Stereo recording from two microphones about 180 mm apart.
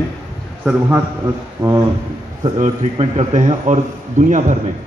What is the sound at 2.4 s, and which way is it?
A man's voice, 35° right (ahead or behind).